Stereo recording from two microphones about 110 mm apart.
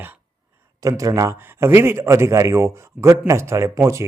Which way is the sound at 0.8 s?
30° right (ahead or behind).